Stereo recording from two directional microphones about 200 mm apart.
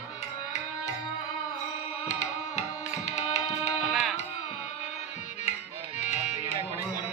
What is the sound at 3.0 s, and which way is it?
Music, 35° left (ahead or behind).